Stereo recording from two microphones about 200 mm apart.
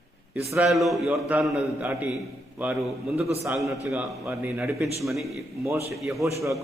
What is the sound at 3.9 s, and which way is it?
Speech, 5° right (ahead or behind).